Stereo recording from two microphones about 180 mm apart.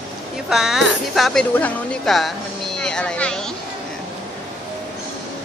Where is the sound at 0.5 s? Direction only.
Centre (ahead or behind).